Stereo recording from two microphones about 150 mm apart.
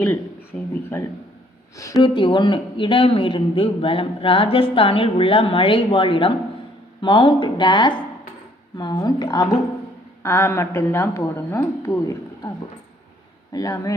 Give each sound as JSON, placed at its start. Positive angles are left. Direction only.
{"t": 0.0, "sound": "a woman's voice", "side_deg": 10}
{"t": 2.0, "sound": "a man's voice", "side_deg": 35}
{"t": 13.5, "sound": "a woman's voice", "side_deg": 25}